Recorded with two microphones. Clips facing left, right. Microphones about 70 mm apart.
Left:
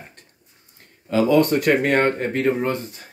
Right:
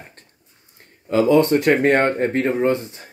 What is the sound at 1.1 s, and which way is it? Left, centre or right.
Speech, right.